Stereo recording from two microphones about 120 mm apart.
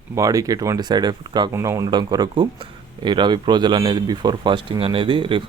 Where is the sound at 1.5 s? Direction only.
25° right (ahead or behind).